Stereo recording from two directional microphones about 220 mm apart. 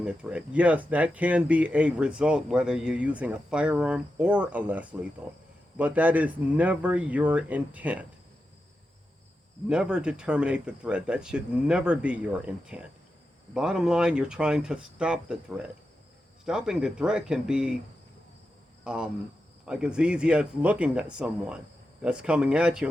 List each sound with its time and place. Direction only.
0.0 s speech: 5° right (ahead or behind)
9.6 s speech: 5° right (ahead or behind)
18.9 s speech: 5° right (ahead or behind)